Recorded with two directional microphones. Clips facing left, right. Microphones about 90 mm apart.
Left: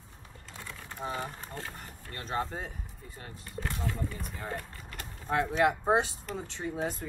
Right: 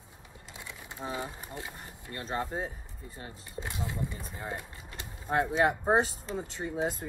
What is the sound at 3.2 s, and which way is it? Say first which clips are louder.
Speech: left 2 dB; 20° right (ahead or behind).